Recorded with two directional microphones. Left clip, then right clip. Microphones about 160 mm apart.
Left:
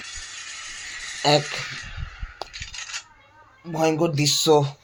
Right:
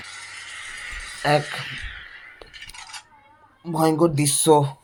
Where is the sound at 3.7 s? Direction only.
15° right (ahead or behind).